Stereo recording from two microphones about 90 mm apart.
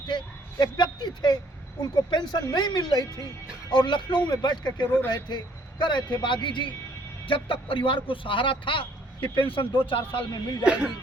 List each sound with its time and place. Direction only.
0.6 s a sound: 55° left (ahead or behind)
1.8 s a man's voice: 50° left (ahead or behind); by 10.4 s 70° left (ahead or behind)
10.7 s speech: 10° right (ahead or behind)